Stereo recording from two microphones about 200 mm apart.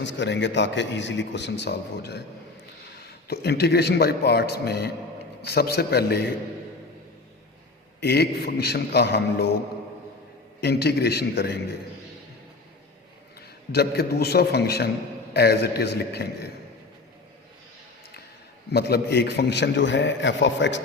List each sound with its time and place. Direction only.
0.0 s a man's voice: 65° left (ahead or behind)
3.2 s a man's voice: 55° left (ahead or behind)
8.0 s a man's voice: 55° left (ahead or behind)
10.6 s a man's voice: 55° left (ahead or behind)
13.7 s a man's voice: 55° left (ahead or behind)
18.7 s a man's voice: 55° left (ahead or behind)